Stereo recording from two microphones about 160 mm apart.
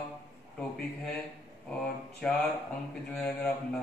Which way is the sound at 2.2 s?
5° left (ahead or behind).